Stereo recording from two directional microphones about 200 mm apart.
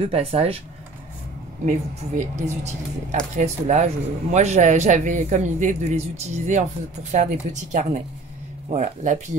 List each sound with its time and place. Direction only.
0.1 s speech: 30° right (ahead or behind)
1.7 s a man's voice: 35° right (ahead or behind)